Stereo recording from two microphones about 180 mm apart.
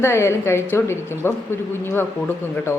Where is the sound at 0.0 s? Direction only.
15° left (ahead or behind).